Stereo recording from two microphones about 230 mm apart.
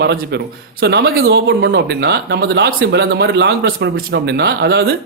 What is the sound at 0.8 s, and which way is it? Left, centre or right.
Speech, right.